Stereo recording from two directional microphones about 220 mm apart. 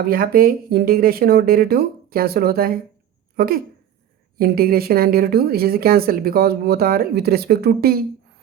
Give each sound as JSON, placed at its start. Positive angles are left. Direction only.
{"t": 0.0, "sound": "a woman's voice", "side_deg": -40}